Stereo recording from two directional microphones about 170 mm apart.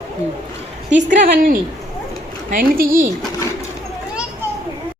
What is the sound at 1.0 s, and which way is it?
A woman's voice, 55° right (ahead or behind).